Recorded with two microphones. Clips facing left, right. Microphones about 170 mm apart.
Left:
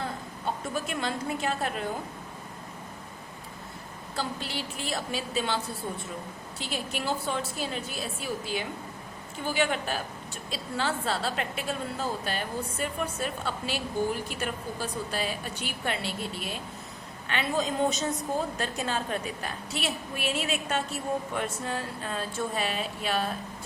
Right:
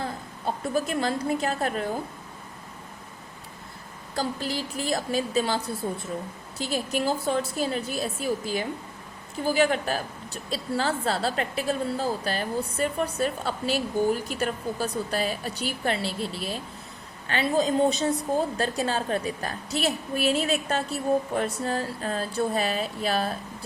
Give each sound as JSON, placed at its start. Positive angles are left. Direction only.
{"t": 0.7, "sound": "a woman's voice", "side_deg": -40}
{"t": 4.1, "sound": "a woman's voice", "side_deg": -40}
{"t": 6.6, "sound": "a woman's voice", "side_deg": -40}